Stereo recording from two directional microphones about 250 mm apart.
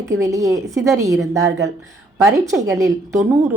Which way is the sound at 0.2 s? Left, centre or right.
Centre.